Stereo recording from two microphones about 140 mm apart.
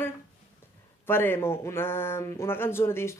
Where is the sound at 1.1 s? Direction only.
15° left (ahead or behind).